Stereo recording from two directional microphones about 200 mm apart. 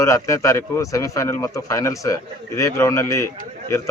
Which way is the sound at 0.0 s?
15° left (ahead or behind).